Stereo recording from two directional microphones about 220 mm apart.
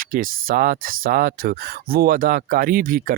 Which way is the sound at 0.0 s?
40° right (ahead or behind).